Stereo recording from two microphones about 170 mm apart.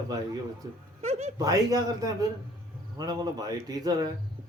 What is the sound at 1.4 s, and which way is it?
Speech, 20° right (ahead or behind).